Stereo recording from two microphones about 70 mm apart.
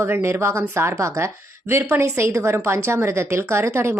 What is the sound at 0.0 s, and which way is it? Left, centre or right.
Speech, right.